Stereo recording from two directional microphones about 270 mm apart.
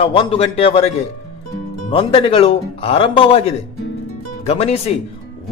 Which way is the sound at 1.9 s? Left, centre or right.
Centre.